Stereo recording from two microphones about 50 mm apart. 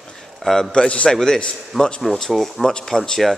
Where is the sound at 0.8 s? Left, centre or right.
Left.